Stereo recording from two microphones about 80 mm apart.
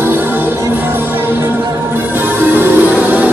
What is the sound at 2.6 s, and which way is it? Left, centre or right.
Music, right.